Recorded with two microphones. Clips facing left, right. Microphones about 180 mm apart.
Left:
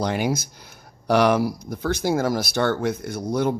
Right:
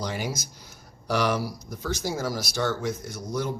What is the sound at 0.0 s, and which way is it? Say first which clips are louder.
Speech: left 8 dB; 60° left (ahead or behind).